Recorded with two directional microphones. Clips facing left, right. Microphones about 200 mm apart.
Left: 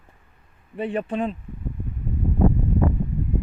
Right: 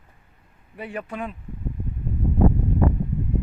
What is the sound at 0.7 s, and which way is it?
Speech, 30° left (ahead or behind).